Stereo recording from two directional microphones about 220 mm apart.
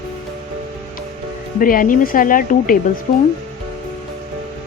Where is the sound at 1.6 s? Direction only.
40° left (ahead or behind).